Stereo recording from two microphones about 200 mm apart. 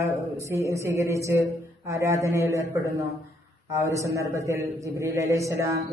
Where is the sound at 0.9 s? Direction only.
15° right (ahead or behind).